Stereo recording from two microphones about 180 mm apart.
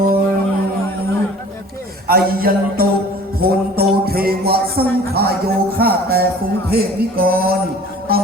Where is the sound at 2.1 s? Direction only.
55° right (ahead or behind).